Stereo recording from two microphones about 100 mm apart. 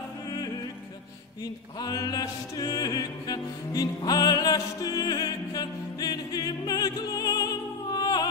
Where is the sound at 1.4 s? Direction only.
40° left (ahead or behind).